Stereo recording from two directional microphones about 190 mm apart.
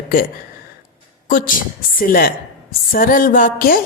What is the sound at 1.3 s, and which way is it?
A woman's voice, 45° left (ahead or behind).